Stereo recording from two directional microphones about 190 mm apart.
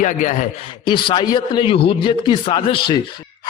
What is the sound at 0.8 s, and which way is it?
A man's voice, 25° left (ahead or behind).